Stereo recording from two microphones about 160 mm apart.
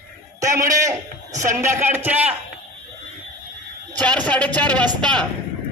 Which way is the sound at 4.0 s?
10° left (ahead or behind).